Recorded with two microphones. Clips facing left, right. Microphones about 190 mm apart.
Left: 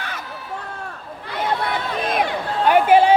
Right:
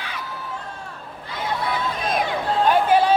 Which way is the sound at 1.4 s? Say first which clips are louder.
Left 2 dB; 65° left (ahead or behind).